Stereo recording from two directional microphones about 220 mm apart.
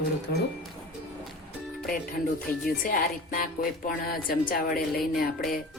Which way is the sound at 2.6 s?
40° left (ahead or behind).